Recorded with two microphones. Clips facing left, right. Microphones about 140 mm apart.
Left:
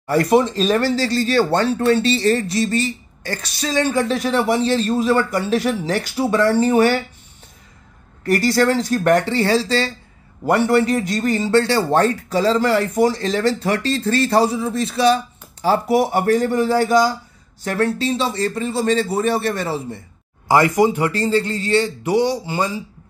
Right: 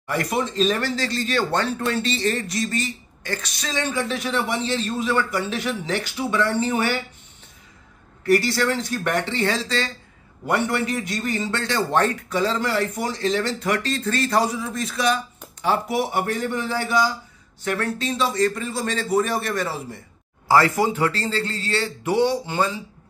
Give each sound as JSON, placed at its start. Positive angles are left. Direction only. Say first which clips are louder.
{"t": 0.0, "sound": "speech", "louder": "left 9 dB", "side_deg": 35}
{"t": 8.3, "sound": "a man's voice", "louder": "left 3 dB", "side_deg": 40}
{"t": 20.4, "sound": "speech", "louder": "left 4 dB", "side_deg": 15}